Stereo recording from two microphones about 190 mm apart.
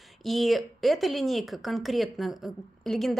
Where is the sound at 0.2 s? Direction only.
Centre (ahead or behind).